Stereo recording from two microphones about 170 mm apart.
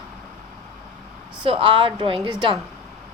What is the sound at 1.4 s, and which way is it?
Speech, 30° right (ahead or behind).